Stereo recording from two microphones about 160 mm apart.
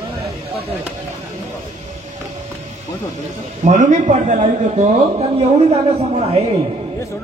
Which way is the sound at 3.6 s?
50° right (ahead or behind).